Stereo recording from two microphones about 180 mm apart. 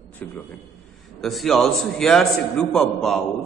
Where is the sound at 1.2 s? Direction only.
Centre (ahead or behind).